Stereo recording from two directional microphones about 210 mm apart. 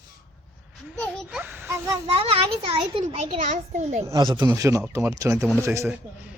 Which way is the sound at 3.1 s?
35° right (ahead or behind).